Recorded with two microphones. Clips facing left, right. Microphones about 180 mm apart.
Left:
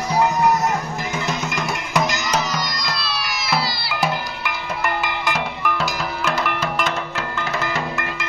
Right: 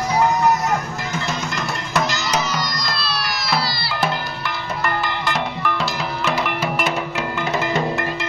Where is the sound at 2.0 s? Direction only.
15° left (ahead or behind).